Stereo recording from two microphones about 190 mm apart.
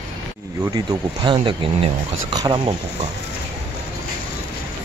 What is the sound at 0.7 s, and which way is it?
Speech, 25° right (ahead or behind).